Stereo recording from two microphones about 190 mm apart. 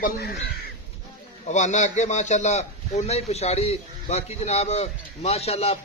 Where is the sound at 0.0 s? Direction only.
50° left (ahead or behind).